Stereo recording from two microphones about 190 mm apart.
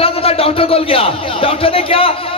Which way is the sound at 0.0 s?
30° left (ahead or behind).